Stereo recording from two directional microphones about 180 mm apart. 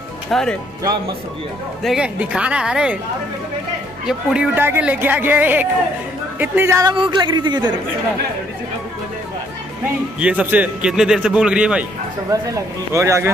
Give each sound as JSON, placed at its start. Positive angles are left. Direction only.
{"t": 0.3, "sound": "a man's voice", "side_deg": 5}
{"t": 1.8, "sound": "a man's voice", "side_deg": -5}
{"t": 4.0, "sound": "a man's voice", "side_deg": -5}
{"t": 10.2, "sound": "a man's voice", "side_deg": -10}
{"t": 12.3, "sound": "speech", "side_deg": -15}